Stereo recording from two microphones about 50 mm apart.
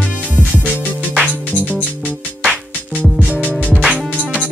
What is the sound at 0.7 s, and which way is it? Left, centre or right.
Music, right.